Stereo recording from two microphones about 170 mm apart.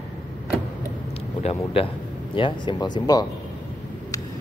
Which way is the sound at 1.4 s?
35° left (ahead or behind).